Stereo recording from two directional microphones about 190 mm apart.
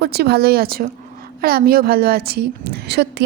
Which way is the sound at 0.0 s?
60° right (ahead or behind).